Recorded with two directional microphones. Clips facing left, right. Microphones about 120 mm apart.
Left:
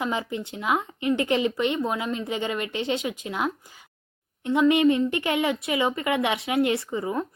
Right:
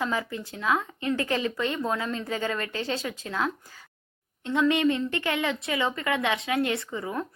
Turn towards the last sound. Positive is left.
turn(degrees=20)  # may be behind; listen again after turning